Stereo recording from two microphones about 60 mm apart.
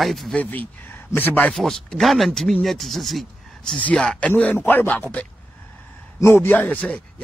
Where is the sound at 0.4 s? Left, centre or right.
Left.